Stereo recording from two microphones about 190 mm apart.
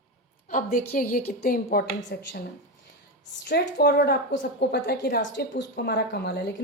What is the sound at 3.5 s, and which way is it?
A woman's voice, 60° left (ahead or behind).